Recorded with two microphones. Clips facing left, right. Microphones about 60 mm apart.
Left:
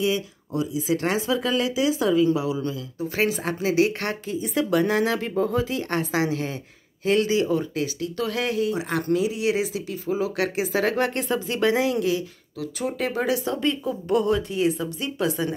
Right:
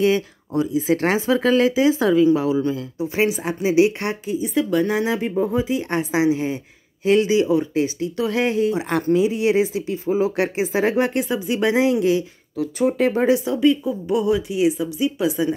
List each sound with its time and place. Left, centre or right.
0.0 s speech: right
3.0 s speech: centre
4.4 s speech: centre; by 13.4 s right
13.5 s speech: centre